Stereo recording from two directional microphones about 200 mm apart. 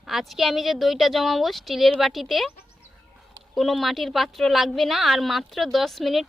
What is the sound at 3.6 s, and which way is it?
A woman's voice, centre (ahead or behind).